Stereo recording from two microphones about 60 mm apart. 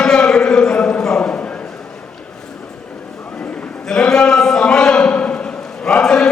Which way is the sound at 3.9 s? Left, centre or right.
Centre.